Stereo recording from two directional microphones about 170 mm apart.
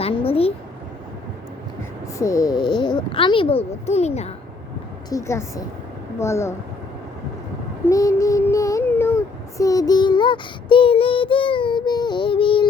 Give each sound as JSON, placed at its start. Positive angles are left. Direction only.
{"t": 0.0, "sound": "a sound", "side_deg": 35}
{"t": 2.1, "sound": "speech", "side_deg": 20}
{"t": 5.0, "sound": "a woman's voice", "side_deg": 20}
{"t": 7.9, "sound": "child singing", "side_deg": 20}